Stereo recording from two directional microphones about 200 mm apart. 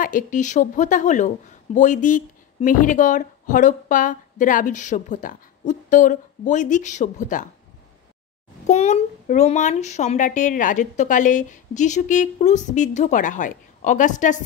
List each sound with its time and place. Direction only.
0.0 s speech: 40° left (ahead or behind)
8.6 s speech: 35° left (ahead or behind)